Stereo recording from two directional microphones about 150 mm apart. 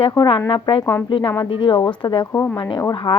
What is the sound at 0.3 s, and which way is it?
Speech, 30° left (ahead or behind).